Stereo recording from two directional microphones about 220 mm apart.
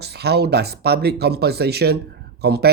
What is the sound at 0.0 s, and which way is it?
Speech, 50° right (ahead or behind).